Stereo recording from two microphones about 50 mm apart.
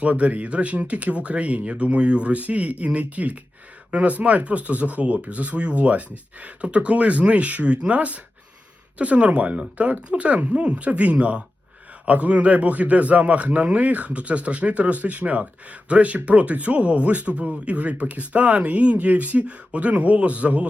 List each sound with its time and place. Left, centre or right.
0.0 s a man's voice: right